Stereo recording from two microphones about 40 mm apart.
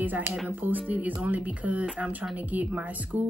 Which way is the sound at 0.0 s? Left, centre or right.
Right.